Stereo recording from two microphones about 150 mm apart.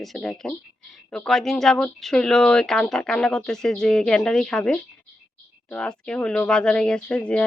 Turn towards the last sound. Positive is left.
turn(degrees=10)  # may be behind; listen again after turning